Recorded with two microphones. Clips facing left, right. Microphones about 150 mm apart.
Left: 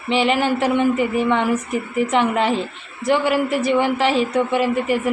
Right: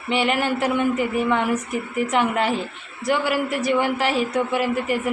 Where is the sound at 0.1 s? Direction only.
5° right (ahead or behind).